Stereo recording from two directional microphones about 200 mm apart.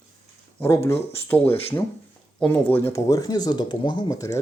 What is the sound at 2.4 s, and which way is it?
Speech, 10° left (ahead or behind).